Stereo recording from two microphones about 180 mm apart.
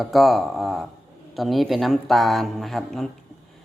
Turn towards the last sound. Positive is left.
turn(degrees=0)  # may be behind; listen again after turning